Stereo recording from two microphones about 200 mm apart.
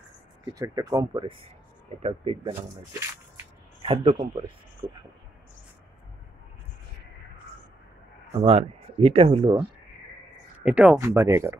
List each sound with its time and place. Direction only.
0.6 s speech: 20° right (ahead or behind)
3.8 s speech: 30° right (ahead or behind)
8.4 s speech: 30° right (ahead or behind)
10.6 s speech: 5° right (ahead or behind)